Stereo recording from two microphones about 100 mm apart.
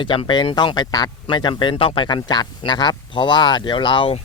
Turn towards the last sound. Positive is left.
turn(degrees=55)  # may be behind; listen again after turning